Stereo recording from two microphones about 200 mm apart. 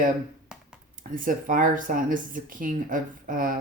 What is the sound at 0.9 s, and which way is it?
Speech, 45° right (ahead or behind).